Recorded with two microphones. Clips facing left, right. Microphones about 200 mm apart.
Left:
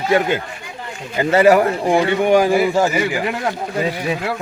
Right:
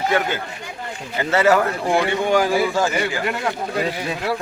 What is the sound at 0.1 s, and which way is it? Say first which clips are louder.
Speech: left 5 dB; 15° left (ahead or behind).